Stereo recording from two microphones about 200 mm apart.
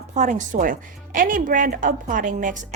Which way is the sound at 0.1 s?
35° right (ahead or behind).